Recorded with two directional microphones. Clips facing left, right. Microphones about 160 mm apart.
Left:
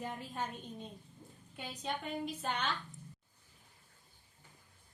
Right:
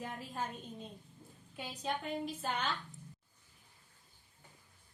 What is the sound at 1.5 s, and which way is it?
A woman's voice, centre (ahead or behind).